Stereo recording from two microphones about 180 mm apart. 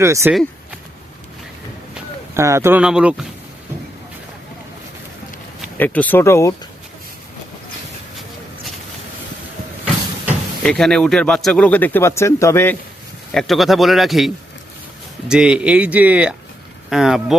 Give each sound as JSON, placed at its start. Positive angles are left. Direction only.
{"t": 0.0, "sound": "speech", "side_deg": -15}
{"t": 2.3, "sound": "speech", "side_deg": -15}
{"t": 5.7, "sound": "speech", "side_deg": 10}
{"t": 10.6, "sound": "speech", "side_deg": 5}
{"t": 13.3, "sound": "speech", "side_deg": 0}